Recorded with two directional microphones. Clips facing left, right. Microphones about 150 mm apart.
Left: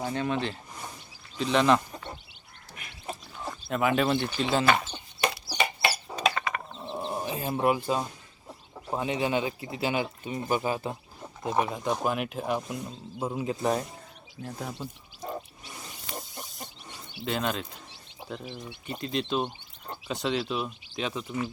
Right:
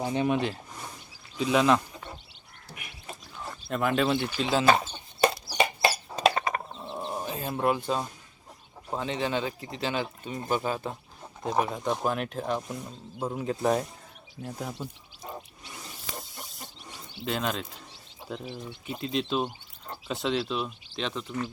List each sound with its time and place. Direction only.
0.0 s speech: 15° right (ahead or behind)
3.5 s speech: centre (ahead or behind)
4.6 s chicken: 30° right (ahead or behind)
6.8 s bird: centre (ahead or behind)
8.9 s speech: 10° left (ahead or behind)
16.1 s a sound: centre (ahead or behind)
17.2 s speech: centre (ahead or behind)